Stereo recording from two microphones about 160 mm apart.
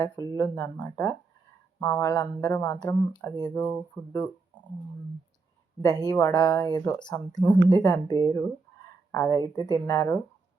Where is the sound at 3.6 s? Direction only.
10° left (ahead or behind).